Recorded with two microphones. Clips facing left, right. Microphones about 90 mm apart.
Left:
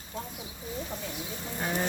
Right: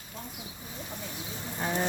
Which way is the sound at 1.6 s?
Centre (ahead or behind).